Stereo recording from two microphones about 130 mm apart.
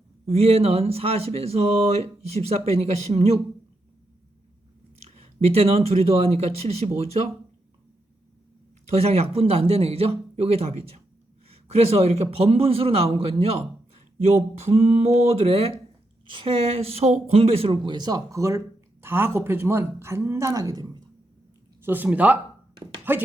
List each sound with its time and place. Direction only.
0.3 s speech: 50° right (ahead or behind)
5.0 s speech: 55° right (ahead or behind)
8.9 s a man's voice: 50° right (ahead or behind)
16.2 s a woman's voice: 40° right (ahead or behind)
21.8 s a woman's voice: 15° right (ahead or behind)